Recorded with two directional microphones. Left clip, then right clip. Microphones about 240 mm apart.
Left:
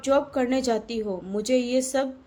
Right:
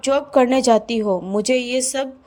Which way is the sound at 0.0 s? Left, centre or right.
Right.